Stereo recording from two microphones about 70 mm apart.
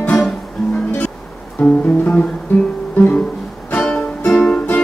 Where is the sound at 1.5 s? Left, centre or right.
Centre.